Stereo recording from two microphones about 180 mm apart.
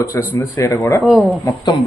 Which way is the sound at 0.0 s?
15° left (ahead or behind).